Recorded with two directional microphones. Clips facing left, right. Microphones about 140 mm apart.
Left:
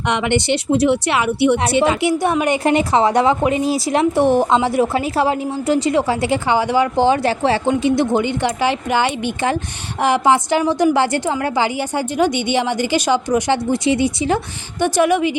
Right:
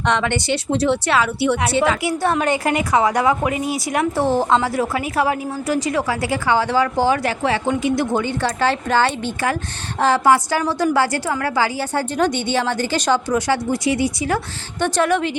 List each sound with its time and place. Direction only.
0.0 s speech: 15° left (ahead or behind)
2.6 s speech: 30° left (ahead or behind); by 15.4 s 10° left (ahead or behind)